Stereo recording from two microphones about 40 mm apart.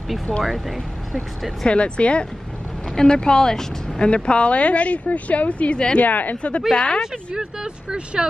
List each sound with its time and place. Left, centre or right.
0.4 s speech: centre
1.7 s speech: left
4.1 s speech: left
5.9 s speech: left
6.7 s speech: left
7.3 s speech: right